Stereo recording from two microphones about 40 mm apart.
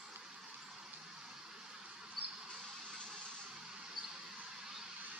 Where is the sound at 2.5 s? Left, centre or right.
Right.